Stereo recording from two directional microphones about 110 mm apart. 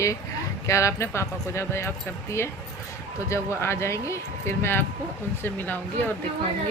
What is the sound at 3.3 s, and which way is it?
Speech, 25° left (ahead or behind).